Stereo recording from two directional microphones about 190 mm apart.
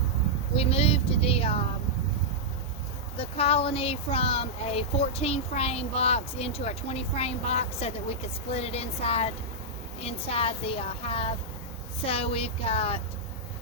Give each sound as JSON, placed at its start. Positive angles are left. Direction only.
{"t": 0.5, "sound": "speech", "side_deg": 30}
{"t": 3.2, "sound": "speech", "side_deg": 30}